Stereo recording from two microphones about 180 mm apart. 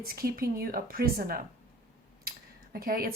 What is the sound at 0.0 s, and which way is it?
A woman's voice, 55° right (ahead or behind).